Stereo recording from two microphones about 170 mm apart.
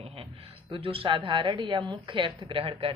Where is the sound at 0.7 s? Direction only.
35° right (ahead or behind).